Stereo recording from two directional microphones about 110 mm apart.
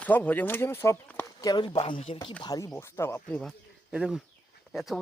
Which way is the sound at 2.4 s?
35° left (ahead or behind).